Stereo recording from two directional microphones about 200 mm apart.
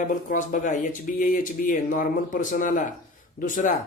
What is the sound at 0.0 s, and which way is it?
Speech, 40° left (ahead or behind).